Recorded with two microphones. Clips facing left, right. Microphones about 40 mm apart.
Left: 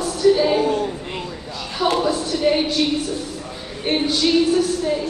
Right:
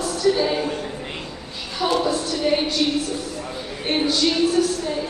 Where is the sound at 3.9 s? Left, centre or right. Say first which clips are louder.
Left 1 dB; centre.